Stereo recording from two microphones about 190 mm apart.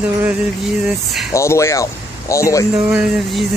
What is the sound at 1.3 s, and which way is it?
Speech, 15° left (ahead or behind).